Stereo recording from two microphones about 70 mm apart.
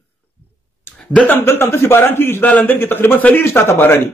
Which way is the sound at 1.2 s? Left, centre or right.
Left.